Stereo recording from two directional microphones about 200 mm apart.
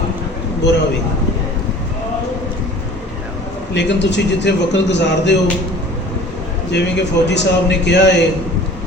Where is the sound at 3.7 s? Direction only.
60° left (ahead or behind).